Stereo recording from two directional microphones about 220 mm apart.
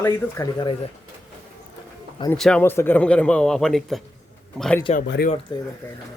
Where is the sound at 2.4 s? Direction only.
5° left (ahead or behind).